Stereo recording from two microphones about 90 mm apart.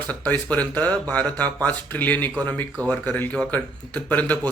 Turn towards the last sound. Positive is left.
turn(degrees=15)  # may be behind; listen again after turning